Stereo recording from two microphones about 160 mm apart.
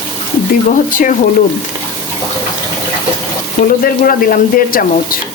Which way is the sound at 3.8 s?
65° left (ahead or behind).